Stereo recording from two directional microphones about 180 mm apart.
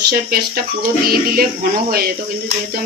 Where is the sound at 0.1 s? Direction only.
55° right (ahead or behind).